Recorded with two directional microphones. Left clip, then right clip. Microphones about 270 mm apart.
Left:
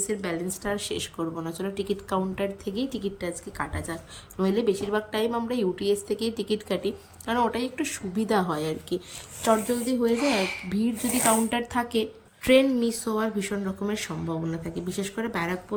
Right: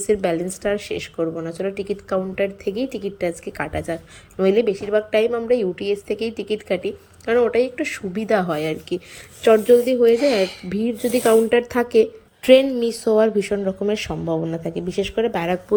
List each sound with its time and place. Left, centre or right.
0.1 s speech: centre
1.5 s speech: left
2.6 s speech: centre
10.2 s speech: centre
10.7 s speech: centre